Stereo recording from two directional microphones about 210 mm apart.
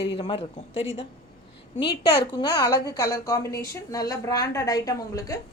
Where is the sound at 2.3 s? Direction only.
20° left (ahead or behind).